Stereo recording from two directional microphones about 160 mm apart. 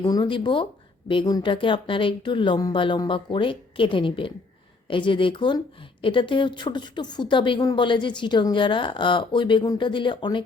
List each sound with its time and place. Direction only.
0.0 s a woman's voice: 25° left (ahead or behind)